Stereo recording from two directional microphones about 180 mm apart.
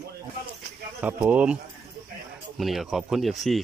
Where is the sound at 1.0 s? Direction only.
10° right (ahead or behind).